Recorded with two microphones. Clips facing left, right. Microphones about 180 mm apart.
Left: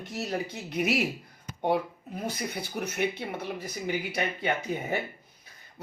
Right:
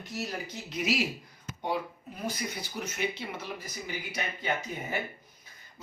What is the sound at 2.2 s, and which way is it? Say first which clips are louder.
Speech: left 1 dB; 60° left (ahead or behind).